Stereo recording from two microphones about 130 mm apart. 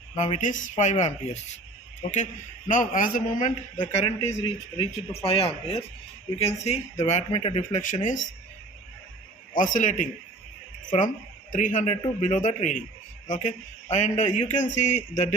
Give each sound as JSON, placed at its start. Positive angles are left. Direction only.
{"t": 0.2, "sound": "speech", "side_deg": 70}
{"t": 2.6, "sound": "a man's voice", "side_deg": 90}
{"t": 3.9, "sound": "speech", "side_deg": 55}
{"t": 7.3, "sound": "speech", "side_deg": 45}
{"t": 7.8, "sound": "speech", "side_deg": 75}
{"t": 9.6, "sound": "speech", "side_deg": 80}
{"t": 10.8, "sound": "speech", "side_deg": 90}
{"t": 11.5, "sound": "speech", "side_deg": 75}